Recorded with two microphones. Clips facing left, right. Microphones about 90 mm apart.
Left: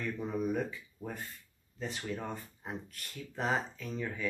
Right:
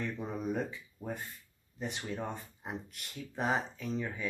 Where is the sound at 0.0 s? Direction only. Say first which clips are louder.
Left 2 dB; 20° right (ahead or behind).